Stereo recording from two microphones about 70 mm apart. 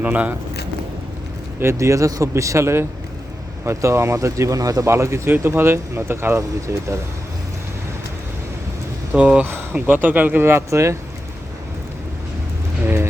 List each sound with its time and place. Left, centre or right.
0.0 s speech: right
1.5 s speech: right
4.9 s speech: right
9.1 s speech: centre; by 10.9 s right
12.8 s a sound: right